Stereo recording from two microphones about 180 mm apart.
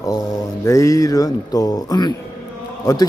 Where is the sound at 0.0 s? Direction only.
20° left (ahead or behind).